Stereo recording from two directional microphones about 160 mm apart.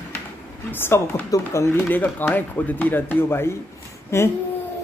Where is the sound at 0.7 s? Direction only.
15° left (ahead or behind).